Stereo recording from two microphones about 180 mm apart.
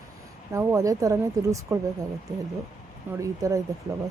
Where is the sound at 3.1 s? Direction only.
15° right (ahead or behind).